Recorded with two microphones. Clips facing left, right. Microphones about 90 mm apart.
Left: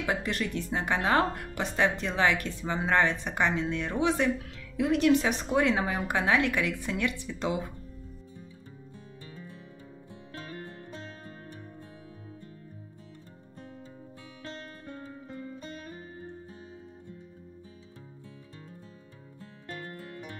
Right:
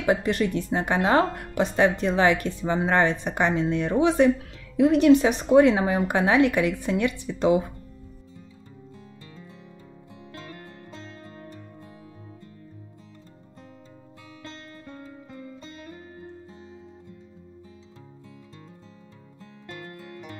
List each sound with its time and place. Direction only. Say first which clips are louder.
0.0 s speech: right 8 dB; 20° right (ahead or behind)